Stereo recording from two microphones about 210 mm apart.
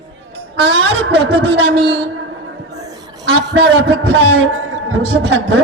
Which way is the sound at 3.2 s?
55° right (ahead or behind).